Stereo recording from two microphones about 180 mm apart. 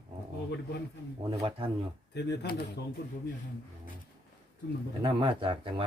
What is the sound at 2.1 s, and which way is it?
Speech, 65° left (ahead or behind).